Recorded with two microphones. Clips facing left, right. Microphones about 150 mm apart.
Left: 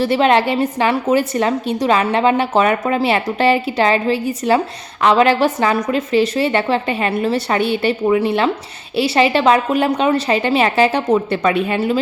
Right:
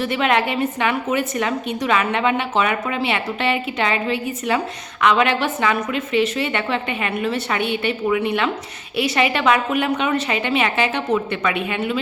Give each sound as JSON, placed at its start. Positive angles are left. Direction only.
{"t": 0.0, "sound": "a woman's voice", "side_deg": 30}